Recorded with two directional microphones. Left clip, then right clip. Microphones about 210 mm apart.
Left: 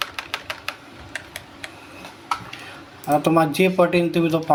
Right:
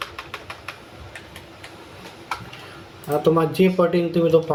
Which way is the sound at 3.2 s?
55° left (ahead or behind).